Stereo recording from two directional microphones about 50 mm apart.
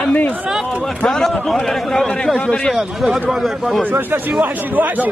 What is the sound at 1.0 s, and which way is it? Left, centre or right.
A man's voice, centre.